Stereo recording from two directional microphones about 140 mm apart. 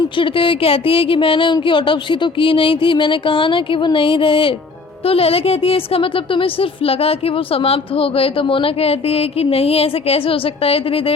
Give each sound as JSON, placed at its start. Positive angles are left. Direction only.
{"t": 0.2, "sound": "a woman's voice", "side_deg": 40}